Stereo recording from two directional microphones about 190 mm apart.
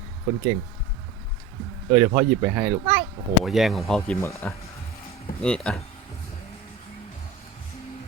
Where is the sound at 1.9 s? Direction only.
10° right (ahead or behind).